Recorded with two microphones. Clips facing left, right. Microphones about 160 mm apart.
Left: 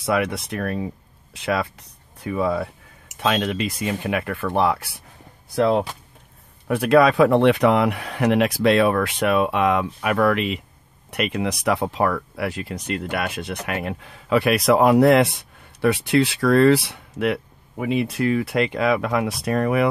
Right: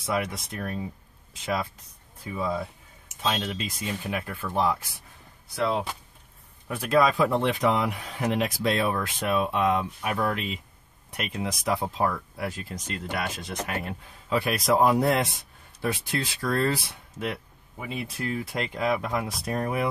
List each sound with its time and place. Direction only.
0.0 s speech: 70° left (ahead or behind)
5.5 s speech: 55° left (ahead or behind)
6.7 s speech: 70° left (ahead or behind)